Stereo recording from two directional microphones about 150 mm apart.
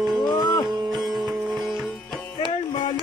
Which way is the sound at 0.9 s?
Centre (ahead or behind).